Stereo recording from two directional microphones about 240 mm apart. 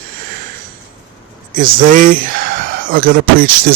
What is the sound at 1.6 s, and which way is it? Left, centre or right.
Speech, right.